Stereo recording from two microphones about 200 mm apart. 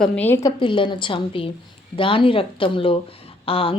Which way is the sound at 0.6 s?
25° left (ahead or behind).